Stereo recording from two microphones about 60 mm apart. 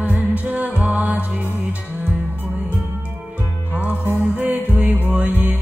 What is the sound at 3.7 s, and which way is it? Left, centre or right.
Music, right.